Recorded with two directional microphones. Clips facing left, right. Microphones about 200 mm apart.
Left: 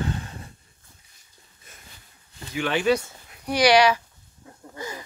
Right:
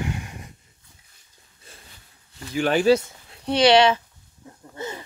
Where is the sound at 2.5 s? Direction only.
40° right (ahead or behind); by 4.0 s 25° right (ahead or behind).